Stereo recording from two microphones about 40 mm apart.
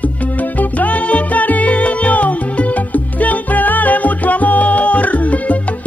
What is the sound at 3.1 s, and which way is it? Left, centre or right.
Music, left.